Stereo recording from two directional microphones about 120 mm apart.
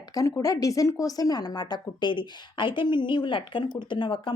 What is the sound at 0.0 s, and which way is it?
Speech, 30° left (ahead or behind).